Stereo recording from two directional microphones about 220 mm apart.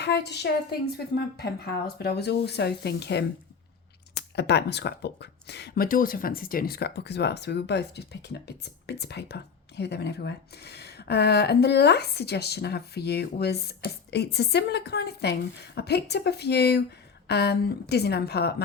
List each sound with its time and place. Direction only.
0.0 s speech: 50° left (ahead or behind)